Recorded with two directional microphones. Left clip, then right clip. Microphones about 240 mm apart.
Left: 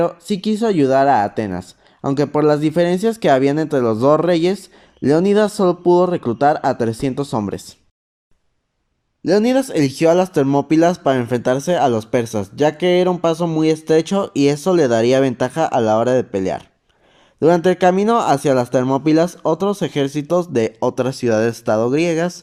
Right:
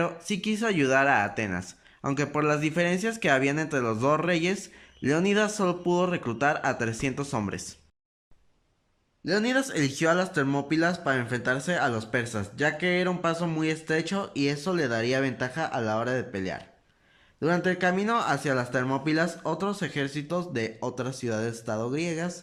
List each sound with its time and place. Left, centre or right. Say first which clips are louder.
0.0 s speech: left 10 dB; centre
9.2 s speech: left 11 dB; left